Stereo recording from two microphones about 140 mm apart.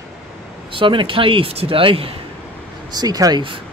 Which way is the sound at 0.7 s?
35° right (ahead or behind).